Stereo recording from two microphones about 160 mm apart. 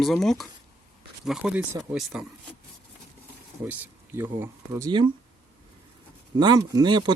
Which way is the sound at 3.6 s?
10° right (ahead or behind).